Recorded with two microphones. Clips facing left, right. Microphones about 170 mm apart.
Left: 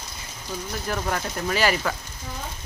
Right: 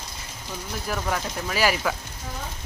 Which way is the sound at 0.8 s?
Centre (ahead or behind).